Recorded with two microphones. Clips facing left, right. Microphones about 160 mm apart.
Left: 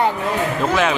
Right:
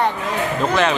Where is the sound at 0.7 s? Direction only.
5° left (ahead or behind).